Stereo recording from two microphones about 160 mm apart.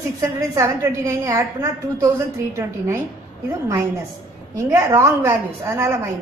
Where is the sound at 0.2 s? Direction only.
20° right (ahead or behind).